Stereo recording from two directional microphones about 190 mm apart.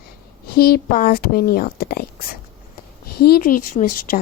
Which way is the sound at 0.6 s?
50° left (ahead or behind).